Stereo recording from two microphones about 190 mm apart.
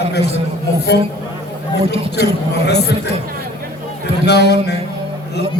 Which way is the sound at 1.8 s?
30° right (ahead or behind).